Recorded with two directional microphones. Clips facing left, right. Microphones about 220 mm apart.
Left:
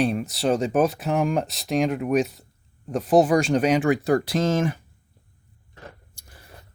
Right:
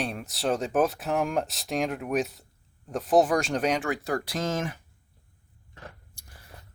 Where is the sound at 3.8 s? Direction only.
20° left (ahead or behind).